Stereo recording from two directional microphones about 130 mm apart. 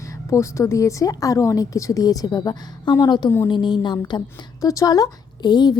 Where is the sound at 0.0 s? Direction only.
20° left (ahead or behind).